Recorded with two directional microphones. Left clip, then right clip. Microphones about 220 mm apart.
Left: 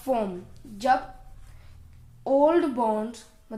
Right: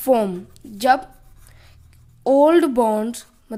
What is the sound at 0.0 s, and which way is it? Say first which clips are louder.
Speech: right 9 dB; 50° right (ahead or behind).